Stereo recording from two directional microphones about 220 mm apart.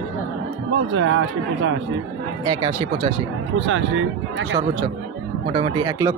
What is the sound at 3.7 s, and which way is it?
Speech, 60° right (ahead or behind).